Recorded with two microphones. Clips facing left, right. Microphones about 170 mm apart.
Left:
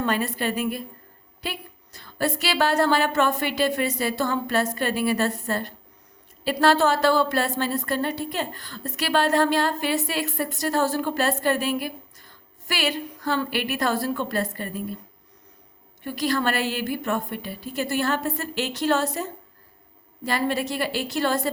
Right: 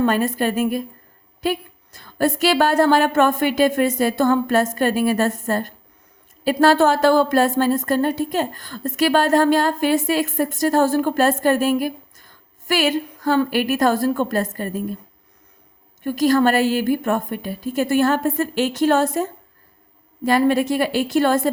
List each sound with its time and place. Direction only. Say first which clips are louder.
0.0 s a woman's voice: right 6 dB; 45° right (ahead or behind)
16.0 s a woman's voice: right 8 dB; 45° right (ahead or behind)